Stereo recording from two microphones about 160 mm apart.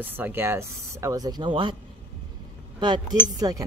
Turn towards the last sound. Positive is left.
turn(degrees=-20)  # may be behind; listen again after turning